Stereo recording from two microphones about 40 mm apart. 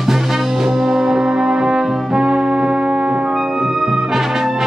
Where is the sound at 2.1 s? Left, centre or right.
Centre.